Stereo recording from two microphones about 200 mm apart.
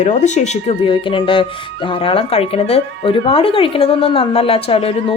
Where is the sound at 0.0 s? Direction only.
35° left (ahead or behind).